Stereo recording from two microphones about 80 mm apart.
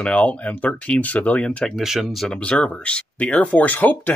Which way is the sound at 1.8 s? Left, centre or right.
Centre.